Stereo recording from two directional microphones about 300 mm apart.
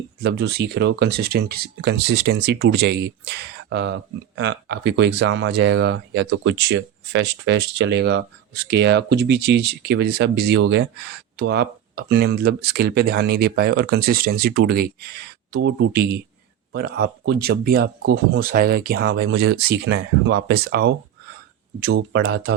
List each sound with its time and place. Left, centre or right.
0.2 s speech: right